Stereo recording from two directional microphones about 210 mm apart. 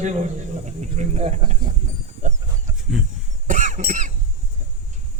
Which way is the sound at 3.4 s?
35° right (ahead or behind).